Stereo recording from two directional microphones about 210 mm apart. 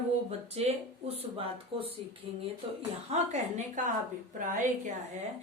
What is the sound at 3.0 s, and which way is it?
A woman's voice, 30° right (ahead or behind).